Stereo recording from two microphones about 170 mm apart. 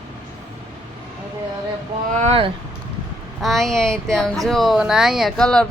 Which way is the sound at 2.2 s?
35° right (ahead or behind).